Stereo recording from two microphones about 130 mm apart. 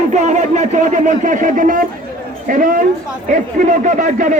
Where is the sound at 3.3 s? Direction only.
75° right (ahead or behind).